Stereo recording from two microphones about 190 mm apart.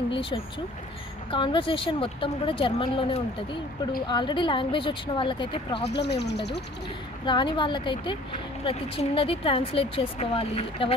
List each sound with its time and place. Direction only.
0.1 s speech: 30° left (ahead or behind)
5.9 s speech: 60° left (ahead or behind)
7.2 s speech: 25° left (ahead or behind)